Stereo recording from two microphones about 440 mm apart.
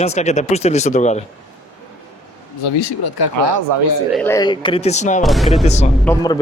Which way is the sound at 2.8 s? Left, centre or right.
Left.